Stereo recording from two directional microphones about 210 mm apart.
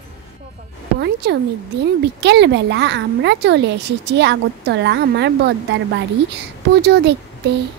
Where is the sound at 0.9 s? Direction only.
55° right (ahead or behind).